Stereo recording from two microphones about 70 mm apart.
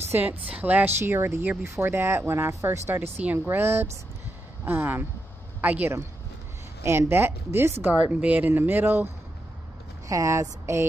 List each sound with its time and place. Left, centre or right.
0.1 s speech: right
0.9 s speech: right
6.8 s speech: right
7.9 s speech: centre
10.0 s speech: right